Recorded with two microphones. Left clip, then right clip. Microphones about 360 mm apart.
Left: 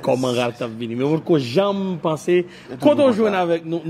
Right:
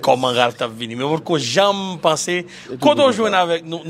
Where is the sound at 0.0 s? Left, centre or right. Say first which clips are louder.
Right 5 dB; right.